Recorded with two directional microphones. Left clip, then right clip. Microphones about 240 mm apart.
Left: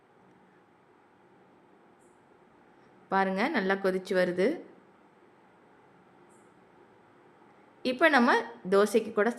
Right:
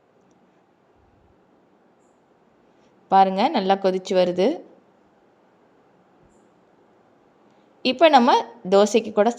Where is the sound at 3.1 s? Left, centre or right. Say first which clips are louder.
Right 11 dB; centre.